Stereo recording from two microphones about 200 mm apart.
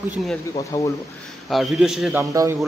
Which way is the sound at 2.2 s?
15° right (ahead or behind).